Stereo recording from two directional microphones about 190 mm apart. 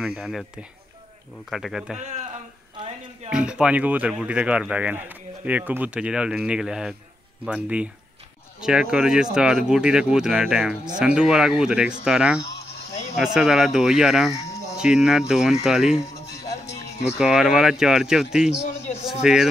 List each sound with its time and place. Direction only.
0.0 s speech: 5° right (ahead or behind)
1.5 s speech: centre (ahead or behind)
3.3 s speech: 5° right (ahead or behind)
12.4 s a sound: 60° left (ahead or behind)
13.1 s speech: 5° right (ahead or behind)
17.2 s speech: 5° right (ahead or behind)